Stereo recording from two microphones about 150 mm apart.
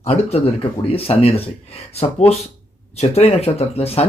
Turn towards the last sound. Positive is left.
turn(degrees=40)  # may be behind; listen again after turning